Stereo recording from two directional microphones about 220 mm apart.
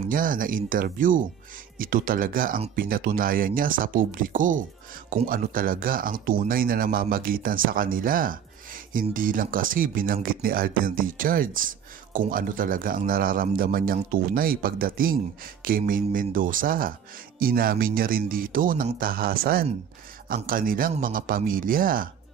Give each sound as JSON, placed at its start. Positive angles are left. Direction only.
{"t": 0.1, "sound": "speech", "side_deg": -40}